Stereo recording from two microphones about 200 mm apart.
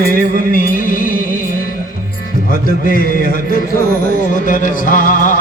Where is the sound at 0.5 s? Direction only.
45° left (ahead or behind).